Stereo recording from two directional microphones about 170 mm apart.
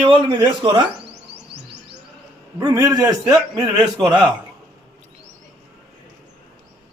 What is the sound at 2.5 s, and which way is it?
A man's voice, 20° right (ahead or behind).